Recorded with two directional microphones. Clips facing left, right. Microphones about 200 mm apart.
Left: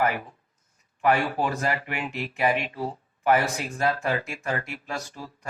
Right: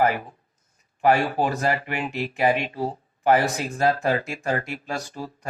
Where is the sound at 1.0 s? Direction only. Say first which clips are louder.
Right 3 dB; 35° right (ahead or behind).